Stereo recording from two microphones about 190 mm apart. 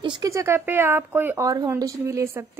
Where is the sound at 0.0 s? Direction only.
20° right (ahead or behind).